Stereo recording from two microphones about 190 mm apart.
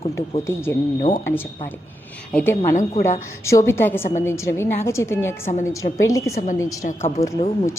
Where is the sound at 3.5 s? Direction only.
15° left (ahead or behind).